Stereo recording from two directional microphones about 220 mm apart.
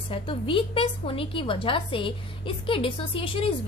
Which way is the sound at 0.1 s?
25° left (ahead or behind).